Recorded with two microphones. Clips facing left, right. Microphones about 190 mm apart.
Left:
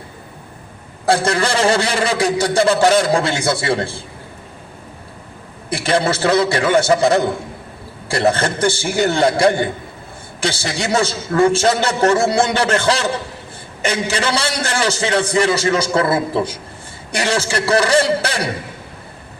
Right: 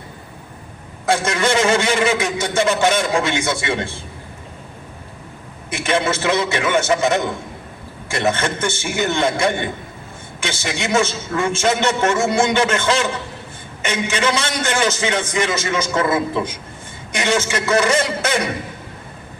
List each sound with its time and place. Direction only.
1.0 s a man's voice: 35° left (ahead or behind)
5.7 s a man's voice: 35° left (ahead or behind)